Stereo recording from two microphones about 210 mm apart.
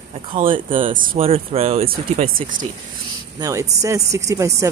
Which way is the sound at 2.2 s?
40° right (ahead or behind).